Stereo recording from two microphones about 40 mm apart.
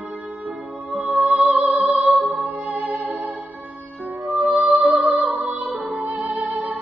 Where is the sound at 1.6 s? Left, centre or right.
Right.